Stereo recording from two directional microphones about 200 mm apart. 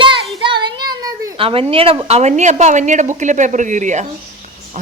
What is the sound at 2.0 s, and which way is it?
A woman's voice, 35° right (ahead or behind).